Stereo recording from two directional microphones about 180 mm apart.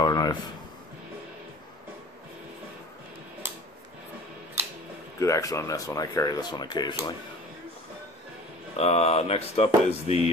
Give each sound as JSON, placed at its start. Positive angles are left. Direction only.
{"t": 0.0, "sound": "a sound", "side_deg": 25}
{"t": 5.2, "sound": "speech", "side_deg": 15}
{"t": 8.7, "sound": "speech", "side_deg": 35}